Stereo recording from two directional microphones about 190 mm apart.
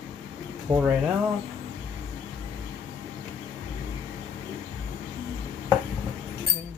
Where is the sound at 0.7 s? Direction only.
20° right (ahead or behind).